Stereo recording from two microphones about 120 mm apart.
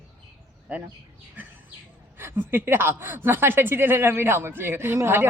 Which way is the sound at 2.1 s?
20° right (ahead or behind).